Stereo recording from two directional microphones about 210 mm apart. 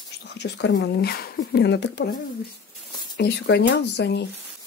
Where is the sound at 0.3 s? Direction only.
55° left (ahead or behind).